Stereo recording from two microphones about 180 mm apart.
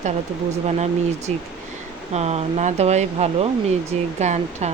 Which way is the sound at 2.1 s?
35° right (ahead or behind).